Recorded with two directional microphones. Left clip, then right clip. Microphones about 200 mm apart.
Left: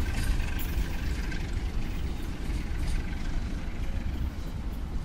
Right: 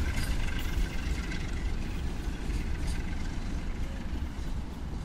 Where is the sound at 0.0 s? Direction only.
20° right (ahead or behind).